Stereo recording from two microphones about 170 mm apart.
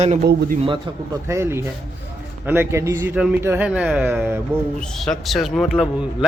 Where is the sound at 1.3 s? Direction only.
15° right (ahead or behind).